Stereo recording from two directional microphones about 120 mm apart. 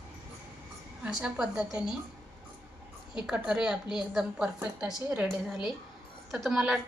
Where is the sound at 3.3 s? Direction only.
5° right (ahead or behind).